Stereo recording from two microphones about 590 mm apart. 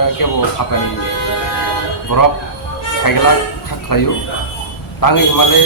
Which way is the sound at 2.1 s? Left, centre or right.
Left.